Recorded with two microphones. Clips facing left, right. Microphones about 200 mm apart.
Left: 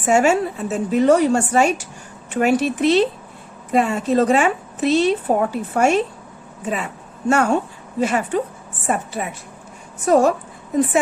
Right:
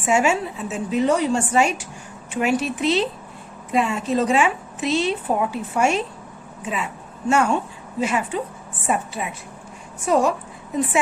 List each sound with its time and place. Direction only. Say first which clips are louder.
0.0 s a woman's voice: left 4 dB; 40° left (ahead or behind)